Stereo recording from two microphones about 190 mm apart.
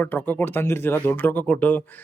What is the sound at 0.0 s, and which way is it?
Speech, 10° left (ahead or behind).